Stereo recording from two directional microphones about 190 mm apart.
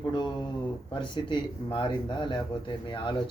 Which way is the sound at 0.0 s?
25° left (ahead or behind).